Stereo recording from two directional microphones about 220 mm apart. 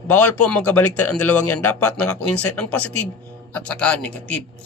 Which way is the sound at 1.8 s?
90° left.